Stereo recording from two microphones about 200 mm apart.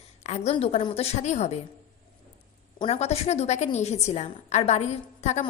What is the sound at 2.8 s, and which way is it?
A woman's voice, 30° left (ahead or behind).